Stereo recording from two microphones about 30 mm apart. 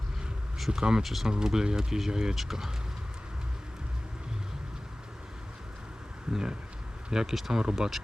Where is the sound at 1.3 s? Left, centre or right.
Right.